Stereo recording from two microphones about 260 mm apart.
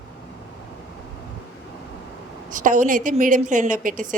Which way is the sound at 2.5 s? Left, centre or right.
Right.